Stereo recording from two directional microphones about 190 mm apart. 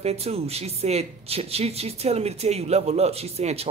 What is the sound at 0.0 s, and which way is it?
Speech, 35° right (ahead or behind).